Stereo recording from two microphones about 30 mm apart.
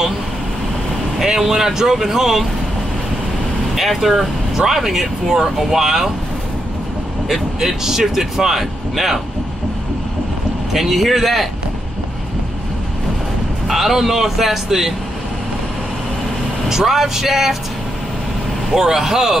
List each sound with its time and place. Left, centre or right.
1.4 s speech: centre
3.7 s speech: centre
7.2 s speech: centre
10.7 s speech: centre
13.7 s speech: centre
16.6 s speech: centre
18.7 s speech: centre